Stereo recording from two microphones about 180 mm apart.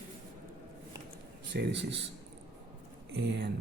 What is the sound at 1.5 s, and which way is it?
Speech, 75° right (ahead or behind).